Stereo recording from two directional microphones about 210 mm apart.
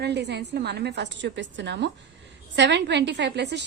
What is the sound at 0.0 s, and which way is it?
A woman's voice, 55° right (ahead or behind).